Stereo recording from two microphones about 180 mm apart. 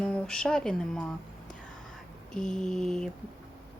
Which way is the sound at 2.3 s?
5° left (ahead or behind).